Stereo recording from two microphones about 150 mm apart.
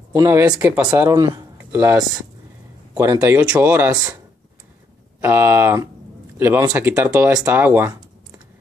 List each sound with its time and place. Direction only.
0.1 s speech: 20° right (ahead or behind)
1.1 s a sound: 25° right (ahead or behind)
1.7 s speech: 10° right (ahead or behind)
2.9 s a sound: 25° right (ahead or behind)
3.2 s speech: 10° right (ahead or behind)
5.2 s a man's voice: 15° right (ahead or behind)